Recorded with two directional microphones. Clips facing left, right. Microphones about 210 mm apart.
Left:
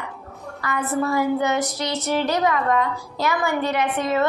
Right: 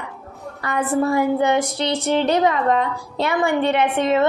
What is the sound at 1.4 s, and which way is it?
A woman's voice, 25° right (ahead or behind).